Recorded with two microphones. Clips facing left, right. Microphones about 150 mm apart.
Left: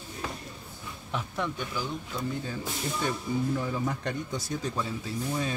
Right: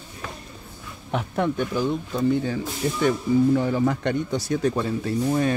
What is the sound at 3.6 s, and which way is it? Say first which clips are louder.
Speech: right 9 dB; 85° right.